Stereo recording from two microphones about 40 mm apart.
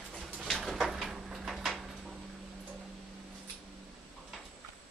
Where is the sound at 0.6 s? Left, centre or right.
Centre.